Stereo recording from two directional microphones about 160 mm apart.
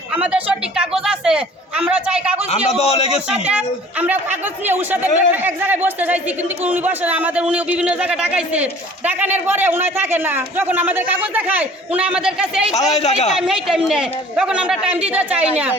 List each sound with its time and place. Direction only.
0.1 s a sound: 10° right (ahead or behind)
2.6 s a man's voice: 40° left (ahead or behind)
3.3 s a man's voice: 10° right (ahead or behind)
12.9 s speech: 45° left (ahead or behind)
13.3 s a man's voice: centre (ahead or behind)